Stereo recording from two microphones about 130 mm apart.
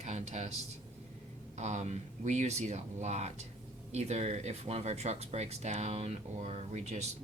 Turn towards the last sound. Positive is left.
turn(degrees=-60)  # may be behind; listen again after turning